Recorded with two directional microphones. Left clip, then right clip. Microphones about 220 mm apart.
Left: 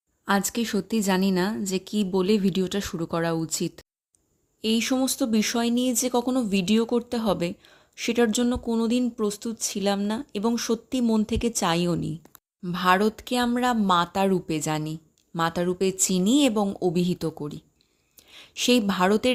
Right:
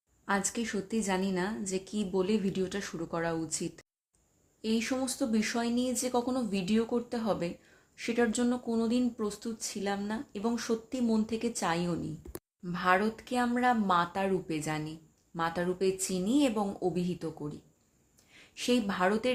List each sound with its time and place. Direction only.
0.3 s speech: 35° left (ahead or behind)